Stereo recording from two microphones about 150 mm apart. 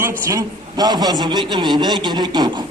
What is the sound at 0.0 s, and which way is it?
A man's voice, 20° right (ahead or behind).